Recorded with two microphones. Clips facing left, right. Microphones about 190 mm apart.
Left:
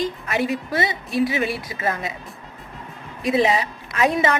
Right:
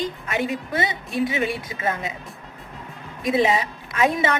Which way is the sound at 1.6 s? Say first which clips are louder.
Left 1 dB; 25° right (ahead or behind).